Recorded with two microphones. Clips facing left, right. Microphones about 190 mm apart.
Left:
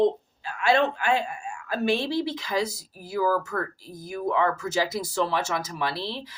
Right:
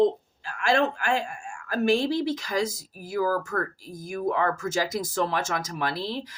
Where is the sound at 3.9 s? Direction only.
45° right (ahead or behind).